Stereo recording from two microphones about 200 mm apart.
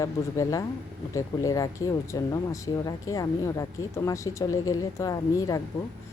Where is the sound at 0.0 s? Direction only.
15° left (ahead or behind).